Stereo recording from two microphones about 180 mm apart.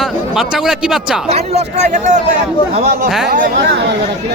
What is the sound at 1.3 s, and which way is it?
Speech, 35° right (ahead or behind).